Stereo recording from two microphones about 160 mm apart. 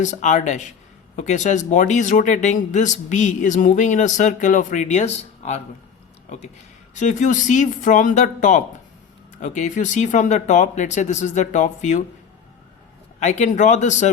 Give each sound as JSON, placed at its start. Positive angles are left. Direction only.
{"t": 0.0, "sound": "speech", "side_deg": 50}
{"t": 6.9, "sound": "speech", "side_deg": 50}
{"t": 13.1, "sound": "speech", "side_deg": 45}